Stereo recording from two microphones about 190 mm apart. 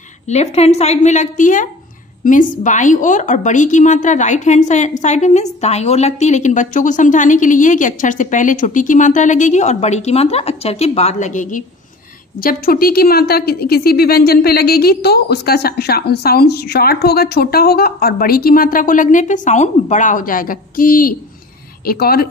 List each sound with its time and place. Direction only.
0.3 s a woman's voice: 35° left (ahead or behind)
12.4 s a woman's voice: 50° left (ahead or behind)